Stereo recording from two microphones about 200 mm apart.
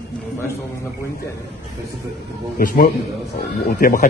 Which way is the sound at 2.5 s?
45° left (ahead or behind).